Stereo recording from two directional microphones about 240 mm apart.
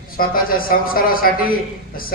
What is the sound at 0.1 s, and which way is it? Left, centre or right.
A man's voice, left.